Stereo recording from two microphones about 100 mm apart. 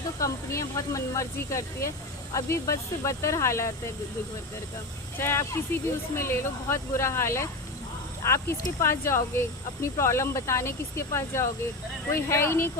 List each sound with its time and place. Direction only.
0.2 s speech: 30° left (ahead or behind)
5.1 s speech: 25° left (ahead or behind)